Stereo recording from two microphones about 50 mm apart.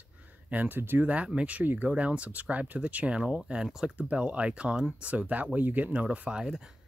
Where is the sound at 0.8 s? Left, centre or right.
Right.